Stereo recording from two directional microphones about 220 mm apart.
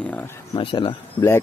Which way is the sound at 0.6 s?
25° left (ahead or behind).